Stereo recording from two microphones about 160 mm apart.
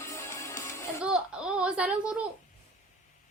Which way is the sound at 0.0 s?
15° left (ahead or behind).